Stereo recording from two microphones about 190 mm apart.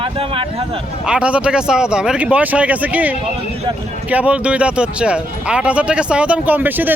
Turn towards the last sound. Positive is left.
turn(degrees=-10)  # may be behind; listen again after turning